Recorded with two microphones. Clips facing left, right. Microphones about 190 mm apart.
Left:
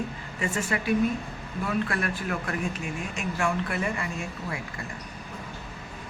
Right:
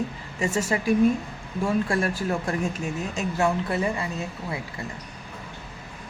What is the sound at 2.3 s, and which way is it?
A man's voice, 25° right (ahead or behind).